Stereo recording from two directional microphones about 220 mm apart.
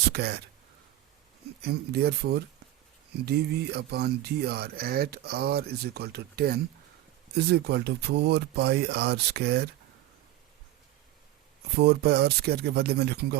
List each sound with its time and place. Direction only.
0.1 s speech: 45° right (ahead or behind)
1.6 s speech: 45° right (ahead or behind)
11.8 s speech: 45° right (ahead or behind)